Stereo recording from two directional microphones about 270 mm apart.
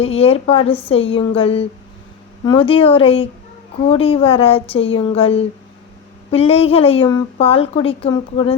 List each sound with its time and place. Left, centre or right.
0.0 s a woman's voice: left